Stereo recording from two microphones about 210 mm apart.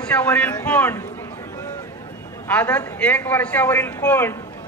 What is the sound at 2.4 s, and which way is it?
A man's voice, 5° left (ahead or behind).